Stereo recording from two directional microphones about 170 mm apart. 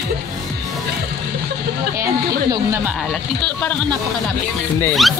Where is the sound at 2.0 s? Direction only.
20° right (ahead or behind).